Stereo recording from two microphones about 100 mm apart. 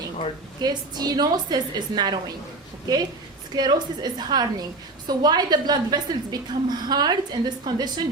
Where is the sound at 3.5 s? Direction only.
45° right (ahead or behind).